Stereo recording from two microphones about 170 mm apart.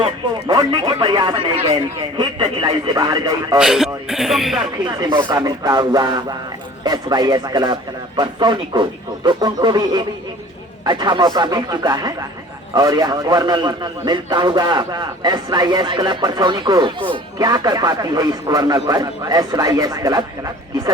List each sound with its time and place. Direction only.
0.0 s a man's voice: 25° right (ahead or behind)
3.6 s speech: 5° right (ahead or behind)
4.9 s a man's voice: 25° right (ahead or behind)